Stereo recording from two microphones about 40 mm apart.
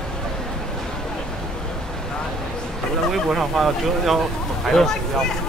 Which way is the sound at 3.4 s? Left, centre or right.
Centre.